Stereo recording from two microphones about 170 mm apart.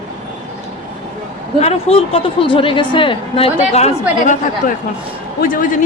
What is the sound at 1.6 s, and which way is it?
A woman's voice, 35° left (ahead or behind).